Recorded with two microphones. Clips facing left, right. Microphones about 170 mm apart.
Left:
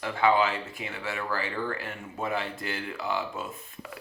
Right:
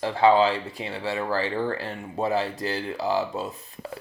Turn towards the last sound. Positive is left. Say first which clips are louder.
# right 5 dB
turn(degrees=-35)  # may be behind; listen again after turning